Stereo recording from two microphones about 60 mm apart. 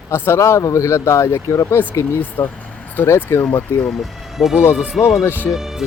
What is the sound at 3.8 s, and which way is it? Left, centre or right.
Speech, centre.